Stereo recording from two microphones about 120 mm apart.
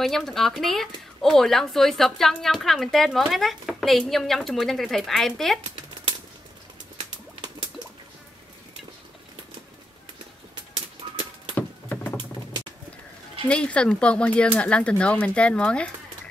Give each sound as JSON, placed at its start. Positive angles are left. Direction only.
{"t": 0.0, "sound": "speech", "side_deg": 5}
{"t": 11.5, "sound": "patter", "side_deg": 15}
{"t": 13.5, "sound": "speech", "side_deg": 10}